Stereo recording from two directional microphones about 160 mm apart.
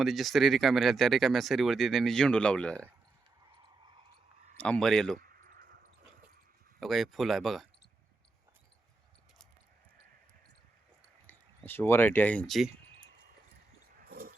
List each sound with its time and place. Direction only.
0.0 s speech: centre (ahead or behind)
4.5 s speech: 5° left (ahead or behind)
5.1 s a sound: 65° right (ahead or behind)
6.7 s speech: centre (ahead or behind)
11.3 s speech: 10° left (ahead or behind)
13.9 s a sound: 65° right (ahead or behind)